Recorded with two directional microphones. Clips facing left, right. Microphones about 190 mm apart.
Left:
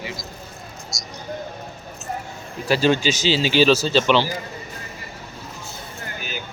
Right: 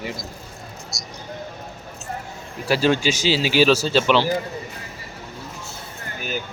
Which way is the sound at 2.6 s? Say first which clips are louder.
Left 1 dB; 10° right (ahead or behind).